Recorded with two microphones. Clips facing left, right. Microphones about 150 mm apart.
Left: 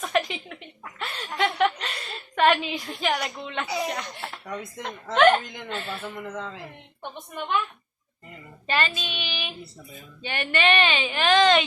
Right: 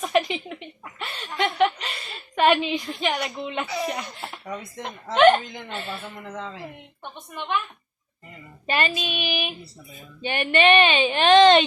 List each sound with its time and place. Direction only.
0.0 s a sound: centre (ahead or behind)
0.9 s a woman's voice: centre (ahead or behind)
8.6 s child singing: 15° right (ahead or behind)
10.2 s a woman's voice: 20° right (ahead or behind)